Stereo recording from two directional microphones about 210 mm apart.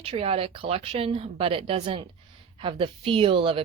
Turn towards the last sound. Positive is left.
turn(degrees=-25)  # may be behind; listen again after turning